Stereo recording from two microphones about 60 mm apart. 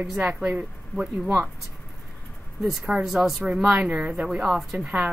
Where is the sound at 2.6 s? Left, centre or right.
Centre.